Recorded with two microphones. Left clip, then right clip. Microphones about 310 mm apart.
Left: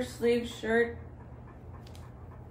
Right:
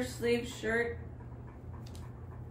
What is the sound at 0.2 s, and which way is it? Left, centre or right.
Speech, centre.